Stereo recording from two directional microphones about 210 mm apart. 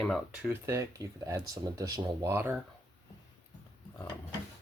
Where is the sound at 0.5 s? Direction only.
15° right (ahead or behind).